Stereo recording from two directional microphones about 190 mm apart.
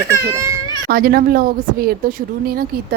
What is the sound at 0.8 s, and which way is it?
Speech, 55° right (ahead or behind).